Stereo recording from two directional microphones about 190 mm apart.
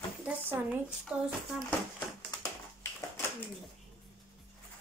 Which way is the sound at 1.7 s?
10° left (ahead or behind).